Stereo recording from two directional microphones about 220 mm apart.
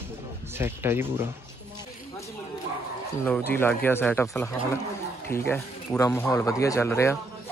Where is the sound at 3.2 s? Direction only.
10° left (ahead or behind).